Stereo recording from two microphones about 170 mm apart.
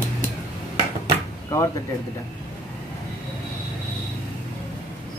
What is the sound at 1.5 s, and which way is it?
Speech, 15° left (ahead or behind).